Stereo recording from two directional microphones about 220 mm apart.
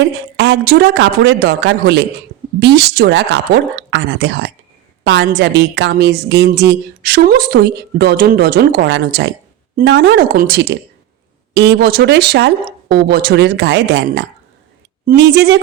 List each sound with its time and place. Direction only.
0.3 s a woman's voice: 50° right (ahead or behind)